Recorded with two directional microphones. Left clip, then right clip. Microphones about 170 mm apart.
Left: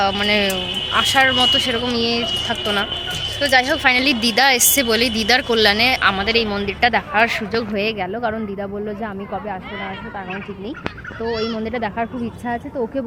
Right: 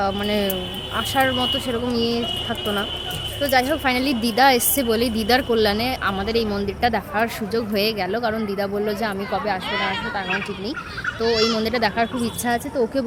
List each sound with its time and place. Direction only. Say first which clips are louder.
0.2 s a woman's voice: left 5 dB; 5° right (ahead or behind)
3.4 s a woman's voice: left 4 dB; 15° right (ahead or behind)
11.3 s a child's voice: right 3 dB; 70° right (ahead or behind)
11.6 s speech: right 2 dB; 10° right (ahead or behind)